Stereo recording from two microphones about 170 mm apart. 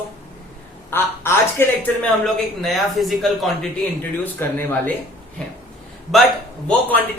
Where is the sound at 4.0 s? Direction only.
15° left (ahead or behind).